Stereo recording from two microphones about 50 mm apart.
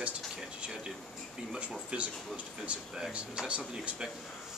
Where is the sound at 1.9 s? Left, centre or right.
Right.